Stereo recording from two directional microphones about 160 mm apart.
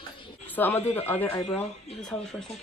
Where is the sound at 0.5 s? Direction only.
10° left (ahead or behind).